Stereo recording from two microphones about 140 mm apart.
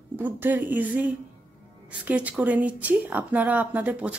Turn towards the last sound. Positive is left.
turn(degrees=-10)  # may be behind; listen again after turning